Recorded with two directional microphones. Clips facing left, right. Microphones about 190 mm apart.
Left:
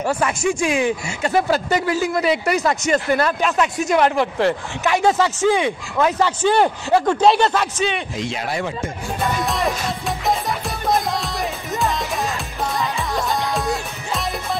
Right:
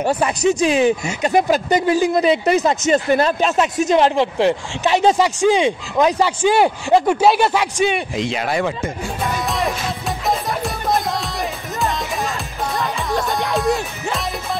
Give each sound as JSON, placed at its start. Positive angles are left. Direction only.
{"t": 0.0, "sound": "speech", "side_deg": -20}
{"t": 8.2, "sound": "speech", "side_deg": -85}
{"t": 9.2, "sound": "music", "side_deg": 0}